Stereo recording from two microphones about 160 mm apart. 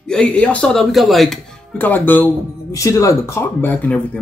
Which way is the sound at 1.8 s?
10° left (ahead or behind).